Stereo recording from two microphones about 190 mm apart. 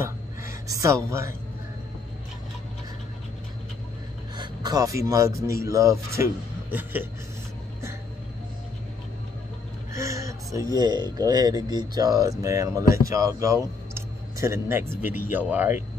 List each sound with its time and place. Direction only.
0.0 s gasp: 15° right (ahead or behind)
4.4 s speech: 20° right (ahead or behind)
9.9 s speech: 15° right (ahead or behind)